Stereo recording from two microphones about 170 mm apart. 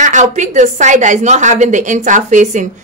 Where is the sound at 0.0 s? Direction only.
45° right (ahead or behind).